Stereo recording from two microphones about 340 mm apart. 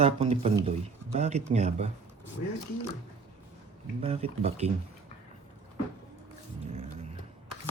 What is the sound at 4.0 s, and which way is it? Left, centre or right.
Speech, centre.